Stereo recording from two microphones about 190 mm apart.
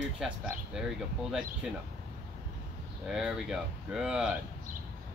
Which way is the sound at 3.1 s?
5° right (ahead or behind).